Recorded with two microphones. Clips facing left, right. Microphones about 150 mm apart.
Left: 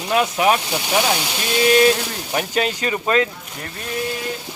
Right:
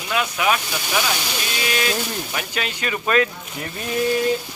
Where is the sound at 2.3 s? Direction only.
35° left (ahead or behind).